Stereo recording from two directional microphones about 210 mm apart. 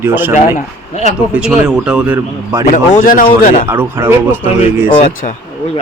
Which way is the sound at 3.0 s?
40° left (ahead or behind).